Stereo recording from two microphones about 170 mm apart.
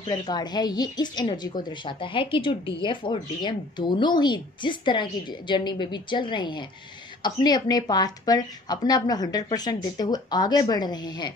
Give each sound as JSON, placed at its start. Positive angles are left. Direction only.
{"t": 0.3, "sound": "a woman's voice", "side_deg": 25}